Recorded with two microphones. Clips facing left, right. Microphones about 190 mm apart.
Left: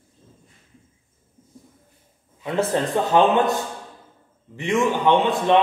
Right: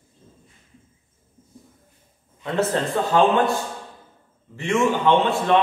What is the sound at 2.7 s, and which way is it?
Speech, 15° left (ahead or behind).